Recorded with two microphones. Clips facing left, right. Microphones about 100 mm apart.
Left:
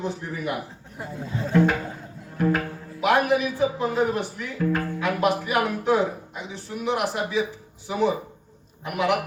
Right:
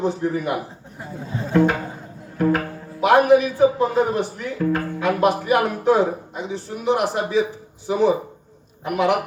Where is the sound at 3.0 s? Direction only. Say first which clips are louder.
Right 6 dB; 35° right (ahead or behind).